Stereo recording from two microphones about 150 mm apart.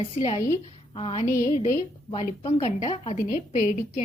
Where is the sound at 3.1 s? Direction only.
55° left (ahead or behind).